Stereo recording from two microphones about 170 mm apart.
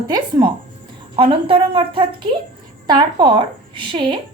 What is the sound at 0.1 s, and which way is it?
A woman's voice, 25° right (ahead or behind).